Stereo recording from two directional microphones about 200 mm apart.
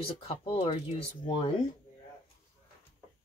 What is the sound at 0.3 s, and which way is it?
Speech, 30° left (ahead or behind).